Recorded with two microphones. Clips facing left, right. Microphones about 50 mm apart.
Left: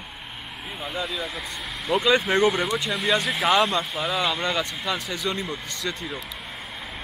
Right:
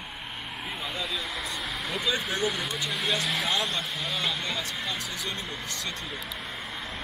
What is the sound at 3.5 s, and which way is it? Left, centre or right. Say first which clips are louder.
Speech: left 9 dB; left.